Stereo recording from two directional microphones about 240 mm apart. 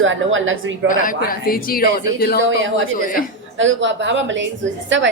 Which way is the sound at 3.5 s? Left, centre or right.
Right.